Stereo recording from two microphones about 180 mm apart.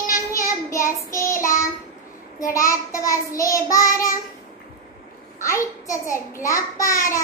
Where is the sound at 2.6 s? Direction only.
15° left (ahead or behind).